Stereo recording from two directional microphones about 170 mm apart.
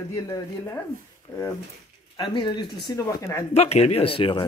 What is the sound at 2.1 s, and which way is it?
Speech, 25° left (ahead or behind).